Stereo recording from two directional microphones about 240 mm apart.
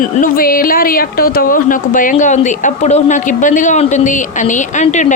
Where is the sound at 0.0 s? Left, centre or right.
Left.